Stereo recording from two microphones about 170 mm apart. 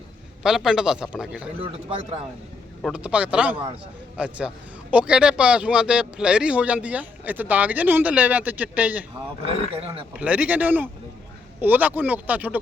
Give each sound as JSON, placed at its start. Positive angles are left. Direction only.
{"t": 0.4, "sound": "a man's voice", "side_deg": 0}
{"t": 2.8, "sound": "a man's voice", "side_deg": -5}
{"t": 9.1, "sound": "speech", "side_deg": -35}
{"t": 10.2, "sound": "a man's voice", "side_deg": -10}